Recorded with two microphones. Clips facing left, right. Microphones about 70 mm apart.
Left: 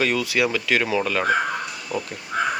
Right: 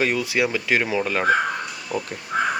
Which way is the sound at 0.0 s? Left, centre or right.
Right.